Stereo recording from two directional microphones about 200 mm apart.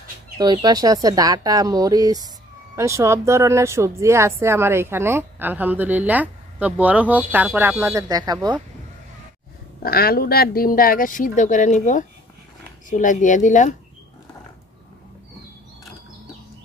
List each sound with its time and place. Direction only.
0.4 s speech: 20° right (ahead or behind)
9.8 s speech: 50° left (ahead or behind)